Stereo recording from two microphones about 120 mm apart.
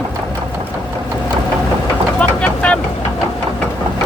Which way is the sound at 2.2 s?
10° left (ahead or behind).